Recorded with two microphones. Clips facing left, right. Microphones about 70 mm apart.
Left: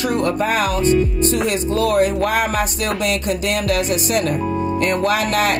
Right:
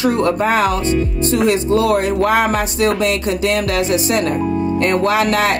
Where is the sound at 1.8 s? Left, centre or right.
Right.